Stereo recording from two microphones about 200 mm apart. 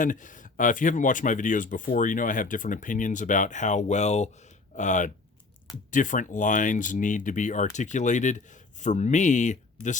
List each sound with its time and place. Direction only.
0.0 s speech: 40° left (ahead or behind)